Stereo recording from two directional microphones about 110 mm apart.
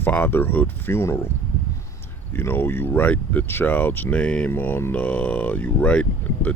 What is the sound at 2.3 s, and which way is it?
Speech, 20° left (ahead or behind).